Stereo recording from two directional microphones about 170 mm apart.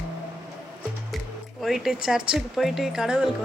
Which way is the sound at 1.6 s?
Centre (ahead or behind).